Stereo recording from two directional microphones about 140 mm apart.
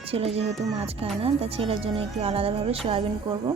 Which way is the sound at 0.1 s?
45° right (ahead or behind).